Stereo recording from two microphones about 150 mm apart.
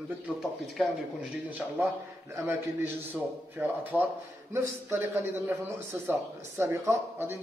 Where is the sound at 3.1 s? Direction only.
10° right (ahead or behind).